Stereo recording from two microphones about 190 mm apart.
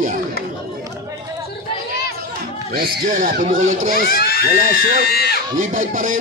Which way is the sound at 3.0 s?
45° right (ahead or behind).